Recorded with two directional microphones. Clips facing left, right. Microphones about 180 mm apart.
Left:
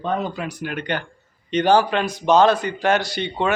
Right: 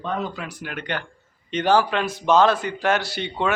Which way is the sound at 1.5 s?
5° right (ahead or behind).